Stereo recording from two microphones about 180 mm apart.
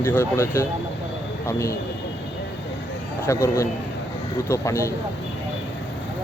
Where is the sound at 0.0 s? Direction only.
10° left (ahead or behind).